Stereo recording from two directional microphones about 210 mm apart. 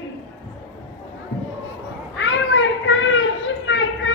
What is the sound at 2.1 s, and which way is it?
Children playing, 65° left (ahead or behind).